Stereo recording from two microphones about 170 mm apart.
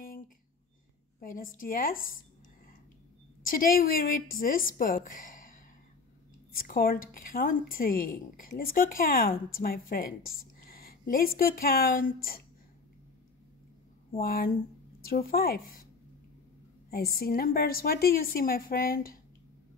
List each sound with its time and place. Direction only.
1.2 s a woman's voice: 55° left (ahead or behind)
3.4 s a woman's voice: 55° left (ahead or behind)
14.1 s a woman's voice: 60° left (ahead or behind)
16.9 s a woman's voice: 60° left (ahead or behind)